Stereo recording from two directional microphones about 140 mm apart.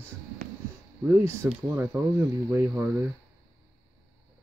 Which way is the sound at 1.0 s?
15° right (ahead or behind).